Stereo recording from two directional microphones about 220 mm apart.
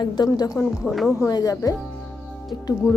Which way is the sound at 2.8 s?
15° left (ahead or behind).